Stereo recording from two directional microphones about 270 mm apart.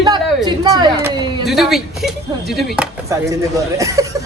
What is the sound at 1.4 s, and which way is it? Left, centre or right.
Speech, centre.